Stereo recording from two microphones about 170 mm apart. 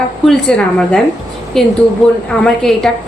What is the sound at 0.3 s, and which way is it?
A woman's voice, 5° left (ahead or behind).